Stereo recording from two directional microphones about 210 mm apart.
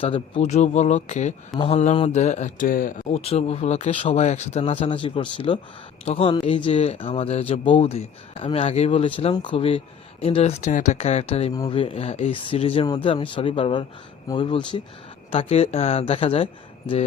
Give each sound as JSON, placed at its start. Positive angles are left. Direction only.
{"t": 0.0, "sound": "speech", "side_deg": 25}